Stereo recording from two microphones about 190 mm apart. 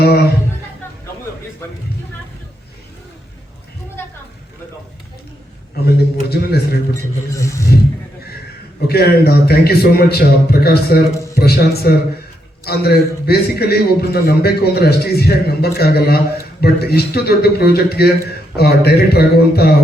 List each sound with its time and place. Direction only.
0.0 s a man's voice: 55° left (ahead or behind)
5.7 s a man's voice: 55° left (ahead or behind)
6.9 s speech: 15° left (ahead or behind)
8.9 s a man's voice: 55° left (ahead or behind)